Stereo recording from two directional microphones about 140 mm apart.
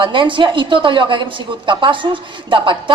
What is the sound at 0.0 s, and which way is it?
A woman's voice, 35° right (ahead or behind).